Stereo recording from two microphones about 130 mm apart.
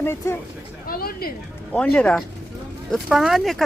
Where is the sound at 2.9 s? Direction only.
5° right (ahead or behind).